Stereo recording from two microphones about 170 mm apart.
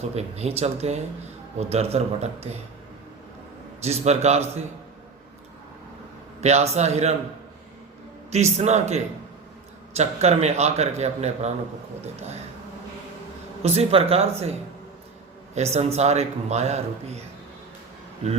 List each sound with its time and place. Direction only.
0.0 s a man's voice: 40° right (ahead or behind)
3.8 s a man's voice: 40° right (ahead or behind)
6.4 s a man's voice: 40° right (ahead or behind)
8.5 s a man's voice: 40° right (ahead or behind)
13.6 s a man's voice: 35° right (ahead or behind)
15.5 s a man's voice: 40° right (ahead or behind)